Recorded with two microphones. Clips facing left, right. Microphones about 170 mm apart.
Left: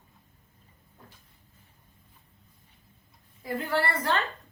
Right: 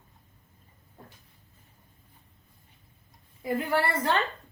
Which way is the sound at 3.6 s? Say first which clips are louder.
Even; 20° right (ahead or behind).